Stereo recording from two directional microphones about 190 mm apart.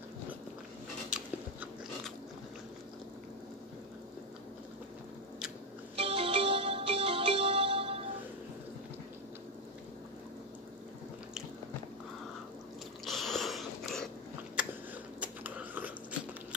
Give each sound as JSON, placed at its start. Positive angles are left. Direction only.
{"t": 1.1, "sound": "biting", "side_deg": -5}
{"t": 5.9, "sound": "ringtone", "side_deg": -30}
{"t": 13.0, "sound": "sniff", "side_deg": 0}
{"t": 14.6, "sound": "biting", "side_deg": -5}
{"t": 15.1, "sound": "a sound", "side_deg": -5}